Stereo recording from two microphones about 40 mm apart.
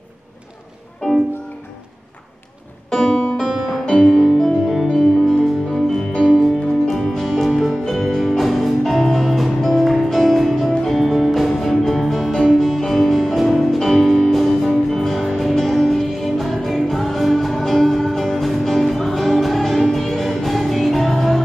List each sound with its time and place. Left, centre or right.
2.9 s music: centre
3.4 s music: centre
3.9 s music: centre
4.4 s music: centre
4.8 s music: centre